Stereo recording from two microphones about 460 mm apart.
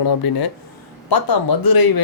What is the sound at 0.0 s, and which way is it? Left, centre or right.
Speech, left.